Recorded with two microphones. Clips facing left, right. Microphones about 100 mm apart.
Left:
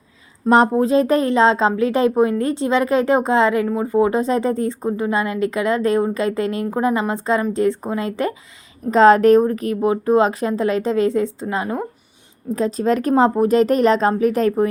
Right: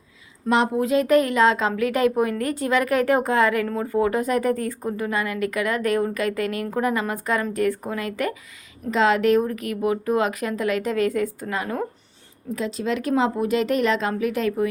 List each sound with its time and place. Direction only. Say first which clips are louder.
0.4 s a woman's voice: left 6 dB; 35° left (ahead or behind)
8.9 s a woman's voice: left 8 dB; 40° left (ahead or behind); by 11.9 s 25° left (ahead or behind)
12.5 s speech: left 7 dB; 40° left (ahead or behind)